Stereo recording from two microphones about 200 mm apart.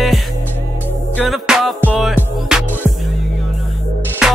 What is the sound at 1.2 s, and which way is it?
Music, centre (ahead or behind).